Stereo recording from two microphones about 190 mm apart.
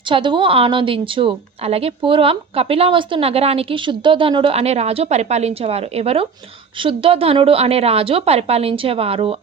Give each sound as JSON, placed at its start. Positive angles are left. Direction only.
{"t": 0.1, "sound": "a woman's voice", "side_deg": -25}